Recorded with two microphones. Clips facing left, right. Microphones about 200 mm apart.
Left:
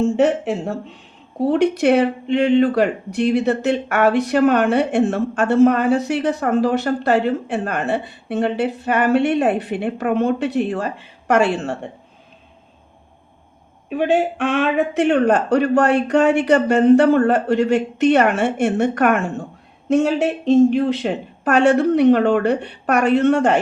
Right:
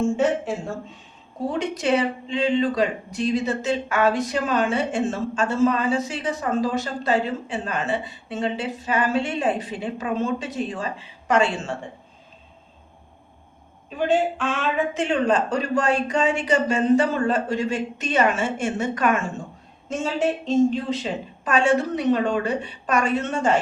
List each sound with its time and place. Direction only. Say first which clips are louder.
0.0 s speech: left 5 dB; 65° left (ahead or behind)
13.9 s speech: left 4 dB; 65° left (ahead or behind)